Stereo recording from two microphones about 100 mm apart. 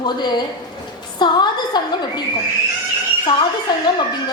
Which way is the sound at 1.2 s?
45° left (ahead or behind).